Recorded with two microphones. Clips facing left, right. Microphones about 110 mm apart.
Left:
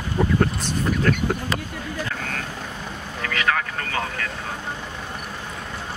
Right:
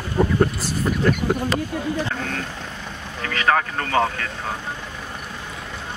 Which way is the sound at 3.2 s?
35° right (ahead or behind).